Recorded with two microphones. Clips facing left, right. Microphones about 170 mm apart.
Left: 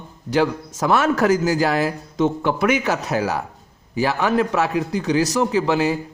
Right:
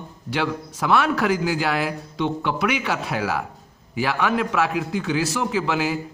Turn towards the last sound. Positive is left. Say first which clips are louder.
# left 4 dB
turn(degrees=35)  # may be behind; listen again after turning